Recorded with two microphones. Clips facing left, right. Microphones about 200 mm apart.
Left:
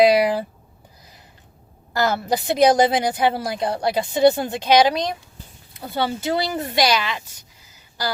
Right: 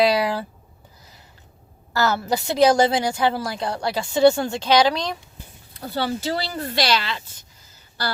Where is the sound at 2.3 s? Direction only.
20° left (ahead or behind).